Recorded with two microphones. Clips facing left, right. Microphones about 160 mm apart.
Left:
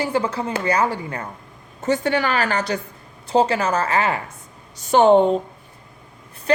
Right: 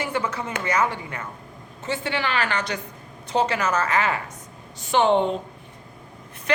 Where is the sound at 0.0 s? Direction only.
30° left (ahead or behind).